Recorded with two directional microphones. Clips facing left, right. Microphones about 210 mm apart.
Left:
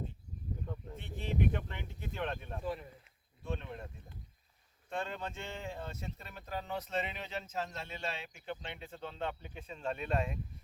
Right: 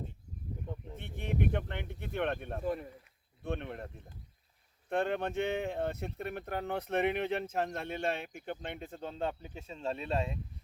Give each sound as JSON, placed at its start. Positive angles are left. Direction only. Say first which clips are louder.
{"t": 0.9, "sound": "speech", "louder": "right 1 dB", "side_deg": -60}
{"t": 3.4, "sound": "speech", "louder": "right 4 dB", "side_deg": -60}
{"t": 4.9, "sound": "speech", "louder": "right 8 dB", "side_deg": -60}